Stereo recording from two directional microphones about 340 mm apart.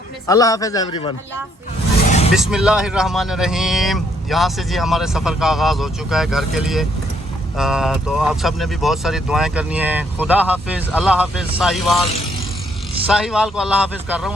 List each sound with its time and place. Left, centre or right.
0.3 s a man's voice: centre
2.0 s vehicle: centre
2.3 s speech: centre
13.1 s speech: centre